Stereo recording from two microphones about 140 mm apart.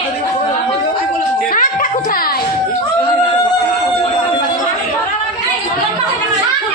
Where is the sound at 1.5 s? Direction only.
80° left.